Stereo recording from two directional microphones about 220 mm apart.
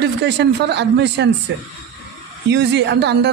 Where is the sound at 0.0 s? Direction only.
50° right (ahead or behind).